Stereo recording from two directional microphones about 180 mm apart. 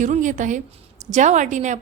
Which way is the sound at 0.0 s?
45° right (ahead or behind).